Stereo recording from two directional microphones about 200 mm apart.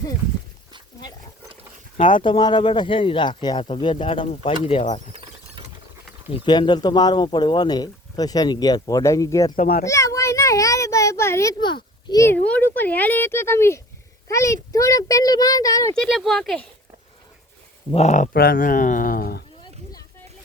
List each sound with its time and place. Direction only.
2.0 s speech: 25° left (ahead or behind)
6.3 s speech: 25° left (ahead or behind)
9.6 s a child's voice: 50° left (ahead or behind)
9.8 s a child's voice: 15° left (ahead or behind)
16.0 s speech: centre (ahead or behind)
17.9 s speech: 35° left (ahead or behind)
18.3 s speech: 45° left (ahead or behind)